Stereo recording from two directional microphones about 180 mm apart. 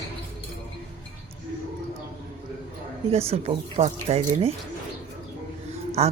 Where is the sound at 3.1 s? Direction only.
35° right (ahead or behind).